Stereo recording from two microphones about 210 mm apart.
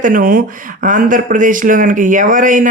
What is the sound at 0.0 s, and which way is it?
Speech, 40° right (ahead or behind).